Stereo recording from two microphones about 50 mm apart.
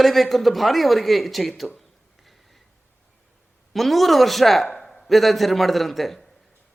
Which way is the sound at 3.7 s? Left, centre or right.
Centre.